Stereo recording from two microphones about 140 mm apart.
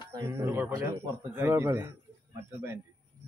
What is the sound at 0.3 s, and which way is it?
A man's voice, 20° right (ahead or behind).